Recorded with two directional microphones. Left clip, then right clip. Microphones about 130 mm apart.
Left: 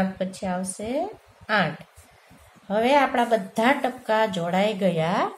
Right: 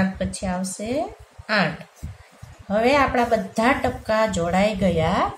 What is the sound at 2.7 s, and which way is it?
A woman's voice, 30° left (ahead or behind).